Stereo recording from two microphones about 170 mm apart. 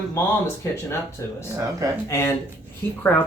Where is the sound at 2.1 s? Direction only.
15° left (ahead or behind).